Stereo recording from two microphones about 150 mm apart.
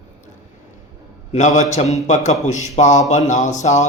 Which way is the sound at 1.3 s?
55° left (ahead or behind).